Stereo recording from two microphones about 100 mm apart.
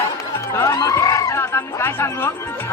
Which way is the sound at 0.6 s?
35° left (ahead or behind).